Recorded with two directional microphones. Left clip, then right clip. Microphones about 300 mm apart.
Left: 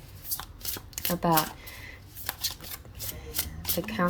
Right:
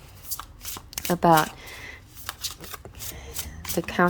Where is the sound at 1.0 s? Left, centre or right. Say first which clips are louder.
Right 7 dB; centre.